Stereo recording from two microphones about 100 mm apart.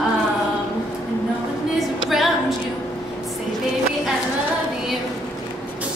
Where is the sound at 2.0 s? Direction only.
Centre (ahead or behind).